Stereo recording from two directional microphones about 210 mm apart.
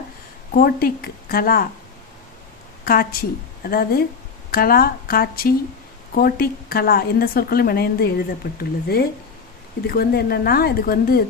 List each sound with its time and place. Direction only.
0.5 s a woman's voice: 45° left (ahead or behind)
2.8 s a woman's voice: 45° left (ahead or behind)